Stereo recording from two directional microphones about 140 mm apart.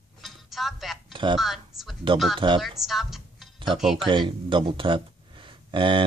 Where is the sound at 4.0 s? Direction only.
35° right (ahead or behind).